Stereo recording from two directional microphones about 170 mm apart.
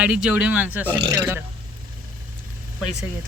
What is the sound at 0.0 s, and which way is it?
Speech, 5° right (ahead or behind).